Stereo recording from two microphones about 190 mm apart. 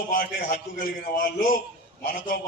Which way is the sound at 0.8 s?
50° left (ahead or behind).